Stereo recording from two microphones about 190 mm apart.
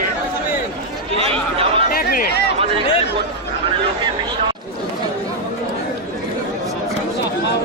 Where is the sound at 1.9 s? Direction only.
50° left (ahead or behind).